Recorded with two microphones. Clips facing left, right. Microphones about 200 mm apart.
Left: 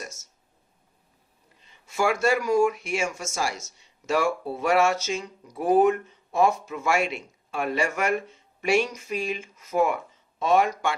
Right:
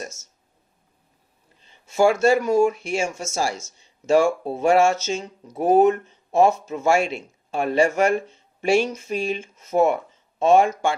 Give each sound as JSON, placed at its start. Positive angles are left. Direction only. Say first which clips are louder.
{"t": 1.6, "sound": "speech", "louder": "right 7 dB", "side_deg": -25}